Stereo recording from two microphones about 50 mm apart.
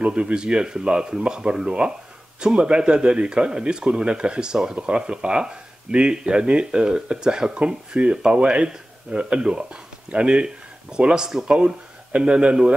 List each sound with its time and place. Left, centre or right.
0.0 s speech: right